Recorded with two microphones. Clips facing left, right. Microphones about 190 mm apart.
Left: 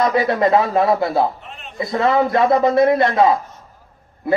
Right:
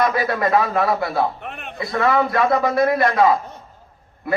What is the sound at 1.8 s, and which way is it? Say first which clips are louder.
Speech: left 2 dB; 20° left (ahead or behind).